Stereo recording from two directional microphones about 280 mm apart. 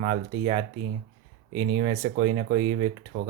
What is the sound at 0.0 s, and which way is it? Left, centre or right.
Speech, right.